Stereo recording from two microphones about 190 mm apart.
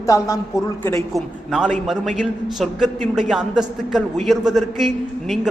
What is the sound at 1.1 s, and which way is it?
A man's voice, 5° right (ahead or behind).